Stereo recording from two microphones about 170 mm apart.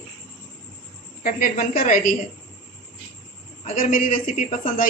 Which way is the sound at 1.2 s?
55° left (ahead or behind).